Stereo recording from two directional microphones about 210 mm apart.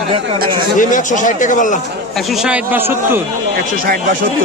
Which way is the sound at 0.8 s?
35° left (ahead or behind).